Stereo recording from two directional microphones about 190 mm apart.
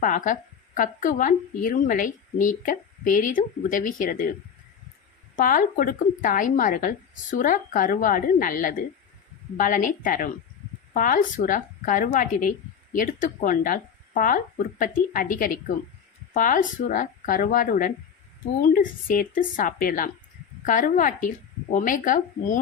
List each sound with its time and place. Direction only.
0.0 s speech: 45° left (ahead or behind)
5.4 s speech: 45° left (ahead or behind)